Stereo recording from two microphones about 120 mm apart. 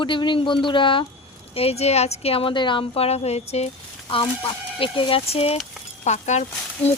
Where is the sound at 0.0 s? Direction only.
40° left (ahead or behind).